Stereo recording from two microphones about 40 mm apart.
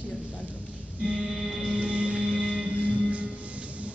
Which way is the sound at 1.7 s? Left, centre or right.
Right.